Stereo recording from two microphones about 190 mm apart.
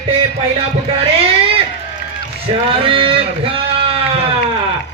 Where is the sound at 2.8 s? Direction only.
30° right (ahead or behind).